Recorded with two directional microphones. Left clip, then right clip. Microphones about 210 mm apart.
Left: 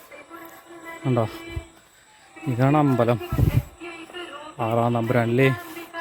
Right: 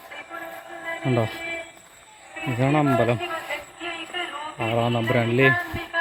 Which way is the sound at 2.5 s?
25° left (ahead or behind).